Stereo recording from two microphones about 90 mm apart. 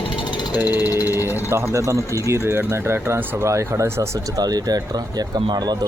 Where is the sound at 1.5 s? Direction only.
30° right (ahead or behind).